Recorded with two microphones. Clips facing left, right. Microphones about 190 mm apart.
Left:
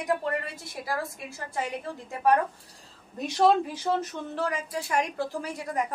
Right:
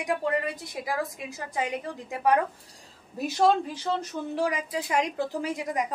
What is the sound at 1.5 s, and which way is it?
Speech, 15° right (ahead or behind).